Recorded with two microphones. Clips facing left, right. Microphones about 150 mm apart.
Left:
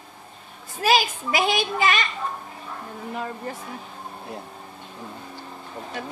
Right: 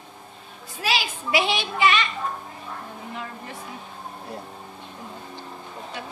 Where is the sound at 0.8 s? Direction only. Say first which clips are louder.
Left 6 dB; 45° left (ahead or behind).